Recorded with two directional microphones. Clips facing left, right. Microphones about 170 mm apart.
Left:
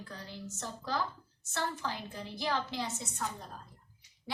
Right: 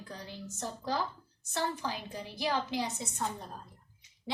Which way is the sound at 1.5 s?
15° right (ahead or behind).